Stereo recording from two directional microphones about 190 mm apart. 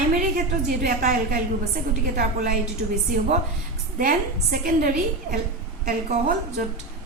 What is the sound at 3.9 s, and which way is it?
A woman's voice, 45° right (ahead or behind).